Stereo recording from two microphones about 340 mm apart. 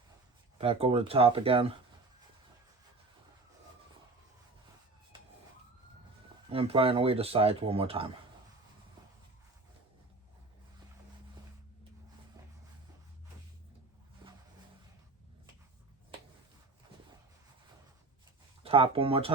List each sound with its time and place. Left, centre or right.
0.6 s speech: centre
6.5 s speech: centre
14.2 s a sound: centre
18.6 s speech: centre